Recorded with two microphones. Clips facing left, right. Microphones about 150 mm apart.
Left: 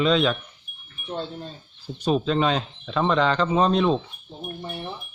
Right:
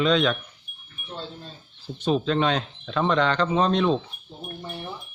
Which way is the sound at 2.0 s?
5° left (ahead or behind).